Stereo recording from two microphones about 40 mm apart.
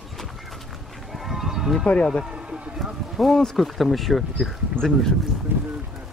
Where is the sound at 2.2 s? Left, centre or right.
Right.